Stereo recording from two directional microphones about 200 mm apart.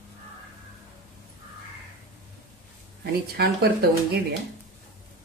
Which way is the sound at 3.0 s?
55° right (ahead or behind).